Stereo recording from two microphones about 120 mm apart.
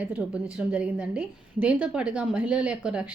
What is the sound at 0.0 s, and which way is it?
A woman's voice, 10° right (ahead or behind).